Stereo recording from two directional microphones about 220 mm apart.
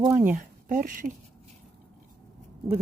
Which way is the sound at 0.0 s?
5° right (ahead or behind).